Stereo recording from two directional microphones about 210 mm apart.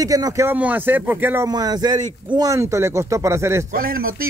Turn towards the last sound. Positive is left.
turn(degrees=-45)  # may be behind; listen again after turning